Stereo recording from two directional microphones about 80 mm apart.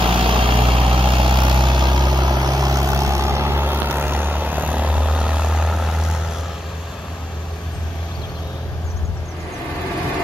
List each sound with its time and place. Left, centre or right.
0.2 s vehicle: right; by 6.2 s centre